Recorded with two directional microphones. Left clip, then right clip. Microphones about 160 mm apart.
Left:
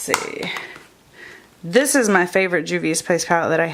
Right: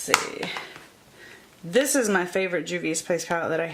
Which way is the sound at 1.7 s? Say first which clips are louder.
Left 6 dB; 30° left (ahead or behind).